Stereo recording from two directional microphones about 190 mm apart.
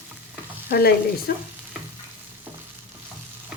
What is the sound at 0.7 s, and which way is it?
Frying, 55° left (ahead or behind).